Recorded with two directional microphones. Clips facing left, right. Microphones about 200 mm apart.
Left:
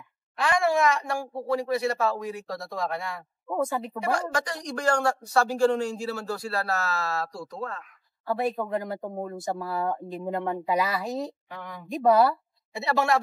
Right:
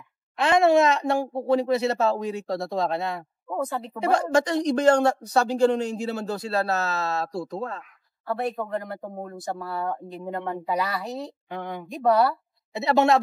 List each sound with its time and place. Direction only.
0.4 s a woman's voice: 25° right (ahead or behind)
3.4 s speech: centre (ahead or behind)
4.0 s a woman's voice: 25° right (ahead or behind)
8.3 s speech: centre (ahead or behind)
11.4 s a woman's voice: 25° right (ahead or behind)
11.9 s speech: centre (ahead or behind)
12.7 s a woman's voice: 20° right (ahead or behind)